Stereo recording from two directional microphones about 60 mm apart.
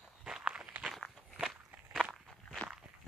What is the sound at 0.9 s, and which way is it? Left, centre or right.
Walk, centre.